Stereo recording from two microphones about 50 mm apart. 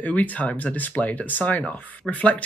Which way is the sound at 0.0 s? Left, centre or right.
Left.